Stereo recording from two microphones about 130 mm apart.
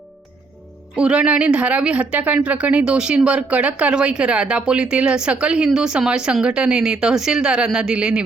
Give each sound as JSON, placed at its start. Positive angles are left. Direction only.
{"t": 0.9, "sound": "a woman's voice", "side_deg": -10}